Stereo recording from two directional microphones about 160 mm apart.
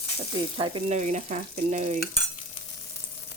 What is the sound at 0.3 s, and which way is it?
Speech, 30° right (ahead or behind).